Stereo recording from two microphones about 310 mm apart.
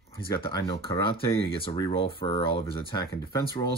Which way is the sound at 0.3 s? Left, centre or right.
Centre.